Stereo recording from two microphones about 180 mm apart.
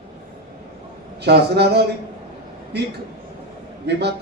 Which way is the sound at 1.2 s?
65° right (ahead or behind).